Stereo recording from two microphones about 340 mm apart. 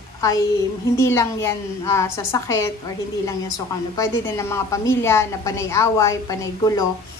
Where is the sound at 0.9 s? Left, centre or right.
Centre.